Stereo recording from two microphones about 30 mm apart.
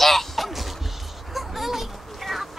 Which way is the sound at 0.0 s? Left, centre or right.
Centre.